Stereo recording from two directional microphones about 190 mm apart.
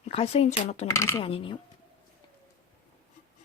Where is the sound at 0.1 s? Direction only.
35° left (ahead or behind).